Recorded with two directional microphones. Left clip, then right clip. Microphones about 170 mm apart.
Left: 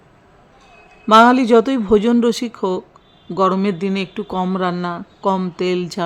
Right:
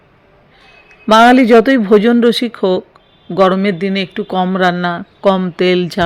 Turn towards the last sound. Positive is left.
turn(degrees=-15)  # may be behind; listen again after turning